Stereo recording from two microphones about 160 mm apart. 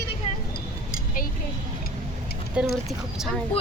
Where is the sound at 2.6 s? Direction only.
5° right (ahead or behind).